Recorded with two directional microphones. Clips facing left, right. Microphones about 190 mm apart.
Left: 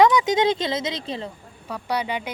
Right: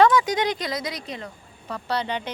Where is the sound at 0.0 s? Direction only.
20° left (ahead or behind).